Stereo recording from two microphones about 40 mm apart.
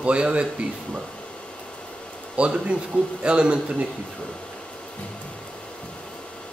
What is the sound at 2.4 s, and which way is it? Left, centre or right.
Speech, right.